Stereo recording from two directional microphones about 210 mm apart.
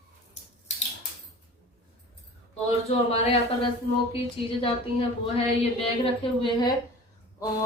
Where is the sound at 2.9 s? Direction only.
30° left (ahead or behind).